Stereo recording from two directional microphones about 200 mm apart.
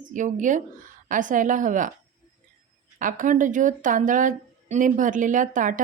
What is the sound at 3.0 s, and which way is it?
A woman's voice, 40° right (ahead or behind).